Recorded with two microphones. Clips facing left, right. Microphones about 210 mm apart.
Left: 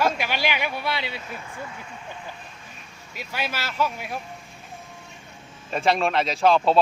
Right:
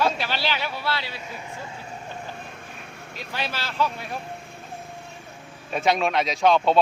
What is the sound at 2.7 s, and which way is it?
Vehicle, 60° right (ahead or behind).